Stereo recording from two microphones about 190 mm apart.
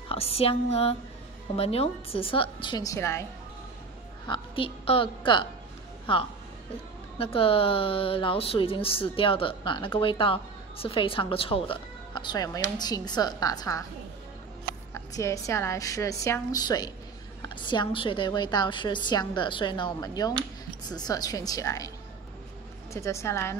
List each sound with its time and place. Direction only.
0.1 s a sound: 30° left (ahead or behind)
1.6 s a woman's voice: 30° left (ahead or behind); by 3.3 s 15° left (ahead or behind)
4.3 s a woman's voice: 30° left (ahead or behind)
15.0 s a woman's voice: 15° left (ahead or behind)
22.9 s a woman's voice: 15° left (ahead or behind)